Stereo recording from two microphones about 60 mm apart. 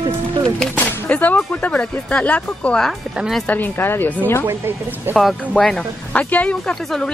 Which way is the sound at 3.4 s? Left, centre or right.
Left.